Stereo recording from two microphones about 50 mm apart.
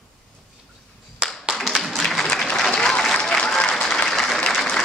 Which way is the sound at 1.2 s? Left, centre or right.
Centre.